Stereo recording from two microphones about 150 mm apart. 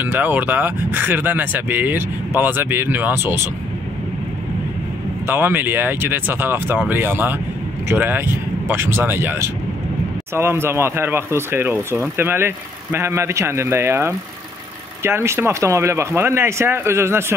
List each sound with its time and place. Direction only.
0.0 s speech: 10° right (ahead or behind)
5.2 s speech: 15° right (ahead or behind)